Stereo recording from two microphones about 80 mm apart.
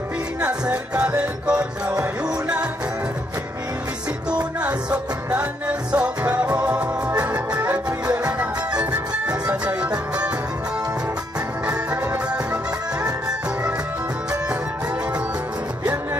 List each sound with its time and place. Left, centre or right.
0.4 s music: centre
4.6 s music: centre